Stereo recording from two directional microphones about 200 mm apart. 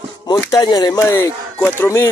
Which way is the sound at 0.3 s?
20° left (ahead or behind).